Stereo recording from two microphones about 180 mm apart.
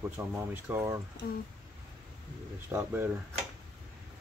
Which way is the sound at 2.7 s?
10° right (ahead or behind).